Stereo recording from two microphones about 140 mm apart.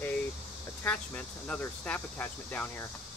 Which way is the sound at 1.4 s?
10° left (ahead or behind).